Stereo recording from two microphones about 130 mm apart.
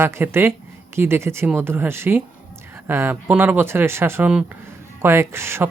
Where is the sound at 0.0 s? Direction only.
20° right (ahead or behind).